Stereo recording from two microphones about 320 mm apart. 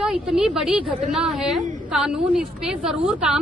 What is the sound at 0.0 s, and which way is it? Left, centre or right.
A woman's voice, centre.